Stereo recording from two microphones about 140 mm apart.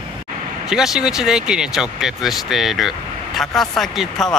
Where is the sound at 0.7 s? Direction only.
5° right (ahead or behind).